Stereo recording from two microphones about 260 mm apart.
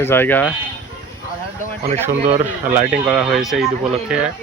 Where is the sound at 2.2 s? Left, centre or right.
Right.